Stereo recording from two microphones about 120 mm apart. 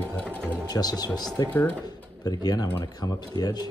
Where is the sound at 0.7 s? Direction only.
30° left (ahead or behind).